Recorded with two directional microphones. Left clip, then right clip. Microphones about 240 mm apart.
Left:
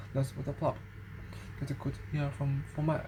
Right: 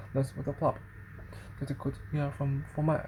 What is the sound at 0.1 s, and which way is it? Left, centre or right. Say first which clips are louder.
Speech: right 4 dB; right.